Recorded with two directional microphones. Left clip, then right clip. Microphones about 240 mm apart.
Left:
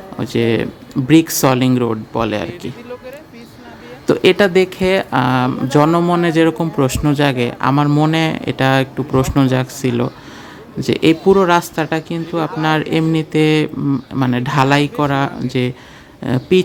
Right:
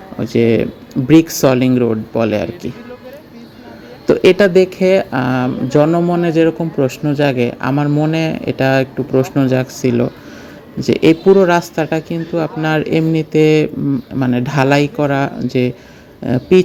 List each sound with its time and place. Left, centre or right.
0.2 s speech: centre
4.0 s speech: centre